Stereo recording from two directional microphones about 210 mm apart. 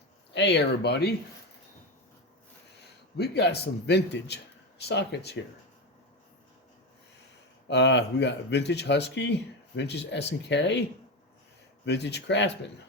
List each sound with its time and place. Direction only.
0.3 s a man's voice: 55° left (ahead or behind)
3.2 s a man's voice: 50° left (ahead or behind)
7.7 s speech: 55° left (ahead or behind)
11.9 s speech: 55° left (ahead or behind)